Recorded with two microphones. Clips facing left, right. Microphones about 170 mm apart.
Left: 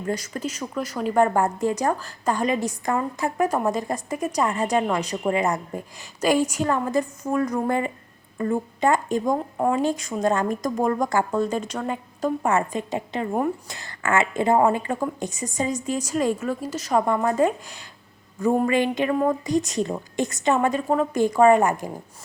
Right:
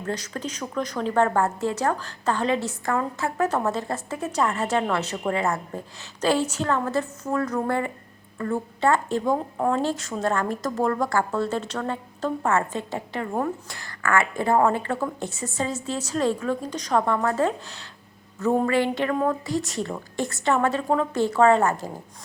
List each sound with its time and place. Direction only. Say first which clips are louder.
0.0 s speech: left 2 dB; 10° left (ahead or behind)